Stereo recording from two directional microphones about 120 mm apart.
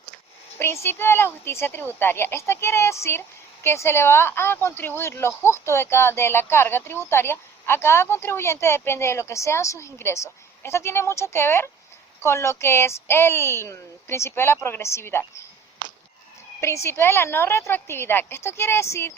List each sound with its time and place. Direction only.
0.6 s a woman's voice: 20° left (ahead or behind)
16.6 s a woman's voice: 25° left (ahead or behind)